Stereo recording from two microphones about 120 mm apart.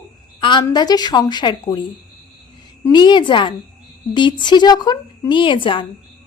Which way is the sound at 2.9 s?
40° left (ahead or behind).